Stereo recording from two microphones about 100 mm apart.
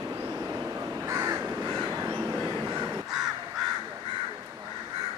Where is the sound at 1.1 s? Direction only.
30° right (ahead or behind).